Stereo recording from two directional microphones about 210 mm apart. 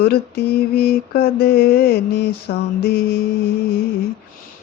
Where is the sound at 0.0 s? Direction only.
50° left (ahead or behind).